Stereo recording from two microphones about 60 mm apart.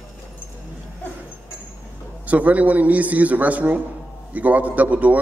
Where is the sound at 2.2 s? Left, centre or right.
Right.